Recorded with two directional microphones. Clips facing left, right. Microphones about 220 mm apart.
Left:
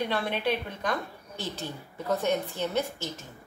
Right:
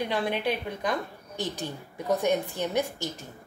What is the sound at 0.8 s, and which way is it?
A woman's voice, 15° right (ahead or behind).